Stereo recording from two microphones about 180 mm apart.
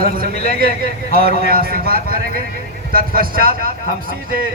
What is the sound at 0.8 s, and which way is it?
A man's voice, 55° right (ahead or behind).